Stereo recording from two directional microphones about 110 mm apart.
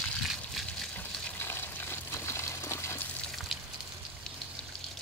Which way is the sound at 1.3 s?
20° left (ahead or behind).